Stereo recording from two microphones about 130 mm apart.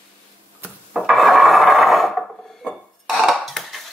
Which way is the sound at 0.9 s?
Centre (ahead or behind).